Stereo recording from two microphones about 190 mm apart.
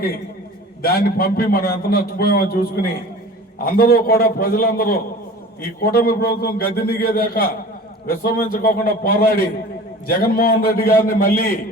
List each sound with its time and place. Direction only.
0.8 s a man's voice: 50° left (ahead or behind)